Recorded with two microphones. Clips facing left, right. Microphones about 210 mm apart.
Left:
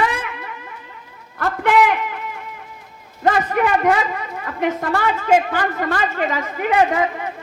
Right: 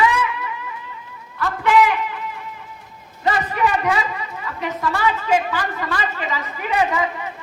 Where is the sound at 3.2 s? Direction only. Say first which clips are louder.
Left 3 dB; 55° left (ahead or behind).